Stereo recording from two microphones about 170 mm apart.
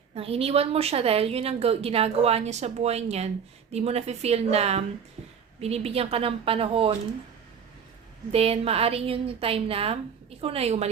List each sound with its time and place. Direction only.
0.1 s a woman's voice: 35° right (ahead or behind)
8.3 s a woman's voice: 35° right (ahead or behind)